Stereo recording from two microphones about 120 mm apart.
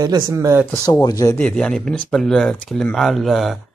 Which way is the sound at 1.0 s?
30° left (ahead or behind).